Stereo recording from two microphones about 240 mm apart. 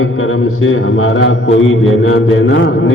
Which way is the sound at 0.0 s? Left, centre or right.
Left.